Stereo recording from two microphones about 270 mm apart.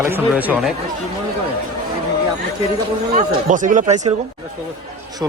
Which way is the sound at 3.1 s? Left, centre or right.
Right.